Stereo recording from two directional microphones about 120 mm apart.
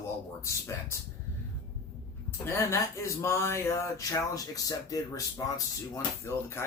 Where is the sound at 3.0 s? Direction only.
25° left (ahead or behind).